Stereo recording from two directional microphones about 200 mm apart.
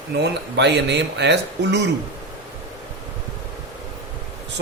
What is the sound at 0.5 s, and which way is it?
Speech, 60° right (ahead or behind).